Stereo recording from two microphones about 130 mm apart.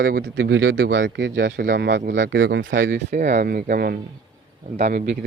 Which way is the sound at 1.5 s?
90° right.